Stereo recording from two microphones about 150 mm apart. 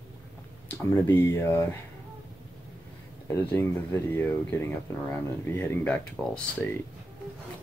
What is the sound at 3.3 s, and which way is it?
Speech, 15° left (ahead or behind).